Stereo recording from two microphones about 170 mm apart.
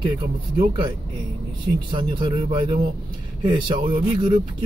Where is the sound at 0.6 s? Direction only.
30° right (ahead or behind).